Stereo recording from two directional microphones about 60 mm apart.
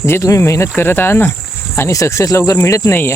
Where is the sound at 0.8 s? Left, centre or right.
Left.